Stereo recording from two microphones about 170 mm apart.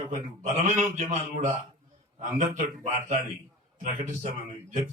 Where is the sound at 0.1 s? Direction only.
45° right (ahead or behind).